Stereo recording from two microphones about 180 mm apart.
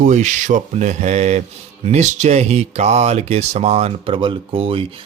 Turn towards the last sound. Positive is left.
turn(degrees=-30)  # may be behind; listen again after turning